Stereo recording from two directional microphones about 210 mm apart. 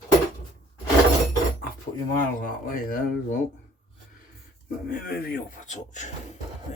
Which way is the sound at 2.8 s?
40° left (ahead or behind).